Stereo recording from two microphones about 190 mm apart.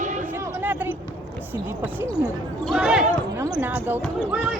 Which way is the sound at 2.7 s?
5° right (ahead or behind).